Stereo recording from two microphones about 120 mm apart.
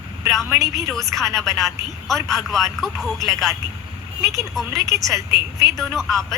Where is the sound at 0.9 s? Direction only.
Centre (ahead or behind).